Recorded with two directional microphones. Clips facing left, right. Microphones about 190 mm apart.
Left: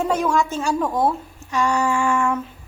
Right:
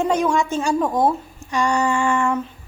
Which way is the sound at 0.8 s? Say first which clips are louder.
Right 1 dB; 15° right (ahead or behind).